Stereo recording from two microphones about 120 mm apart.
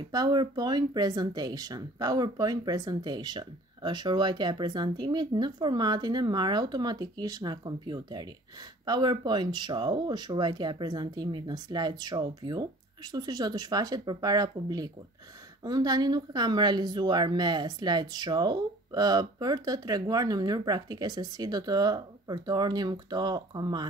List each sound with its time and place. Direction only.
0.1 s speech: 35° right (ahead or behind)